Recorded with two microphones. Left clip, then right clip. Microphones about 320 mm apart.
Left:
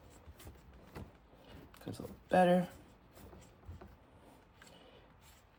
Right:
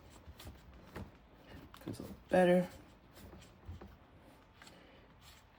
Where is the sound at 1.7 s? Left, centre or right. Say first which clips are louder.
Even; centre.